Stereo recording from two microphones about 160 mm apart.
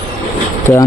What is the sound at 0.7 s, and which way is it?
Speech, 20° left (ahead or behind).